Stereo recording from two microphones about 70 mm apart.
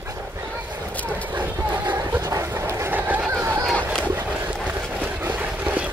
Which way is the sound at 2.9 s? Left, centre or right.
Right.